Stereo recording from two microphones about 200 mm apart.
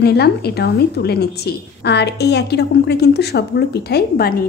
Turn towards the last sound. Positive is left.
turn(degrees=50)  # may be behind; listen again after turning